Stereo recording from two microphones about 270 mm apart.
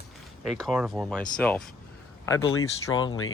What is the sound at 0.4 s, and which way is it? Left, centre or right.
Speech, centre.